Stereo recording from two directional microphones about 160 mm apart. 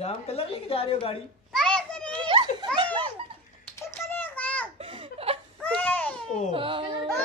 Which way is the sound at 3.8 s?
15° left (ahead or behind).